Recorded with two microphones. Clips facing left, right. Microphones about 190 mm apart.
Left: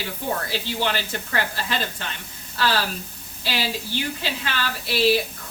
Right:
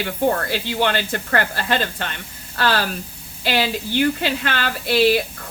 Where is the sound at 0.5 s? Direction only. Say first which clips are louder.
Right 5 dB; 60° right (ahead or behind).